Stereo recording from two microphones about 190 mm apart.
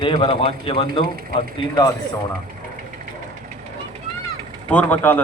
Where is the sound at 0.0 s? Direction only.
25° left (ahead or behind).